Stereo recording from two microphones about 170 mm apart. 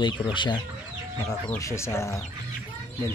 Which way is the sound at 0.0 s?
30° left (ahead or behind).